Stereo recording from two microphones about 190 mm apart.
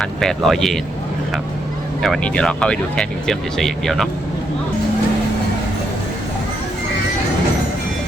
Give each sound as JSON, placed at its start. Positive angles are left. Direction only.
{"t": 0.0, "sound": "speech", "side_deg": 0}
{"t": 2.0, "sound": "speech", "side_deg": 5}